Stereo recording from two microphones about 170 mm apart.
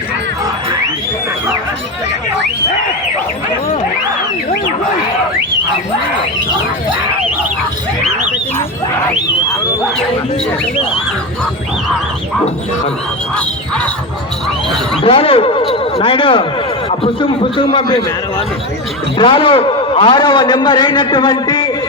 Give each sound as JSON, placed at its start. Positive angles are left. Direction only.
{"t": 13.3, "sound": "music", "side_deg": 5}
{"t": 15.0, "sound": "a man's voice", "side_deg": 35}